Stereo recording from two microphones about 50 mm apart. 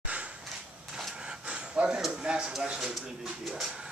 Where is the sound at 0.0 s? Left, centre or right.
Right.